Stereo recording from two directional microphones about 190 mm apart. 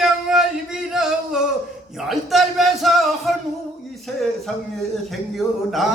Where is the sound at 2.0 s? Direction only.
Centre (ahead or behind).